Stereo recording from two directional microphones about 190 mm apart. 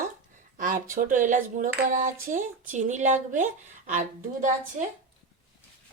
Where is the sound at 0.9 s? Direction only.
45° right (ahead or behind).